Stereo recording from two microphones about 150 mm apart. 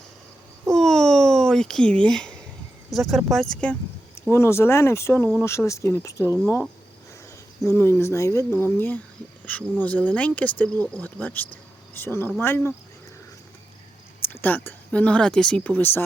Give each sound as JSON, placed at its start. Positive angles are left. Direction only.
{"t": 0.7, "sound": "a sound", "side_deg": 5}
{"t": 2.9, "sound": "speech", "side_deg": 0}
{"t": 7.8, "sound": "speech", "side_deg": 15}
{"t": 14.4, "sound": "speech", "side_deg": 10}